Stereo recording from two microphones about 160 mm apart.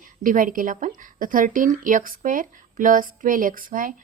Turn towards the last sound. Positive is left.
turn(degrees=-60)  # may be behind; listen again after turning